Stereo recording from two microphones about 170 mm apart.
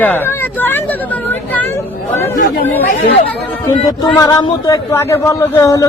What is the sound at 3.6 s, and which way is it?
Speech, 20° left (ahead or behind).